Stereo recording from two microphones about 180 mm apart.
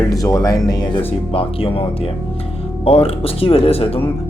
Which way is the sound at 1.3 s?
30° left (ahead or behind).